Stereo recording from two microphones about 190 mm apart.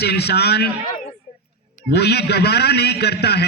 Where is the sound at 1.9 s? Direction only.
60° left (ahead or behind).